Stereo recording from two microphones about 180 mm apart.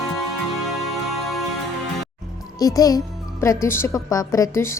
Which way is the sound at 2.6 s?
20° left (ahead or behind).